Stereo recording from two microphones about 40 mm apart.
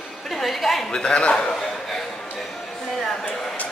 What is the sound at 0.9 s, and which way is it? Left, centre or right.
Speech, left.